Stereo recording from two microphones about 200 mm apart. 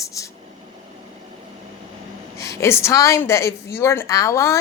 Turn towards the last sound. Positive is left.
turn(degrees=15)  # may be behind; listen again after turning